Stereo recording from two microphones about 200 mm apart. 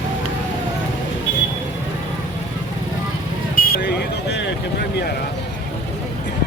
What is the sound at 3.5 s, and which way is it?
Vehicle, 50° left (ahead or behind).